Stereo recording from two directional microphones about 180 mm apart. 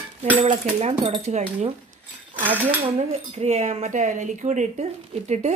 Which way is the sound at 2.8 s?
35° right (ahead or behind).